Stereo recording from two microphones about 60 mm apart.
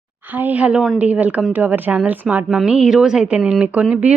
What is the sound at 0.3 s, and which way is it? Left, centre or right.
A woman's voice, right.